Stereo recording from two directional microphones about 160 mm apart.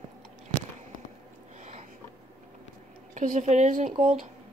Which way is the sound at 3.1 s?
50° right (ahead or behind).